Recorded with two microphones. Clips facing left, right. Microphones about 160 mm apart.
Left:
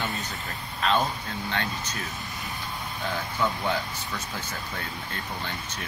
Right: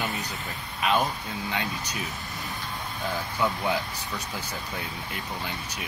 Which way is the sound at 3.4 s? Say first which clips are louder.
Right 1 dB; 15° right (ahead or behind).